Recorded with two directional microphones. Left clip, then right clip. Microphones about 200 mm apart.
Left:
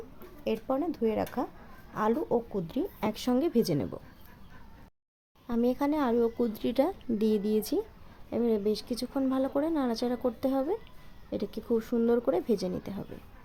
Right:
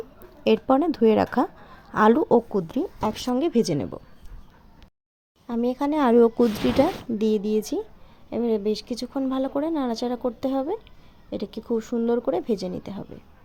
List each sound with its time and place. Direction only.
0.4 s speech: 40° right (ahead or behind)
3.0 s speech: 10° right (ahead or behind)
5.5 s speech: 15° right (ahead or behind)
6.0 s speech: 35° right (ahead or behind)
6.3 s speech: 20° right (ahead or behind)